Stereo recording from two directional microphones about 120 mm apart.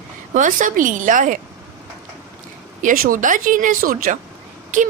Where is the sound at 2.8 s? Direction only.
90° right.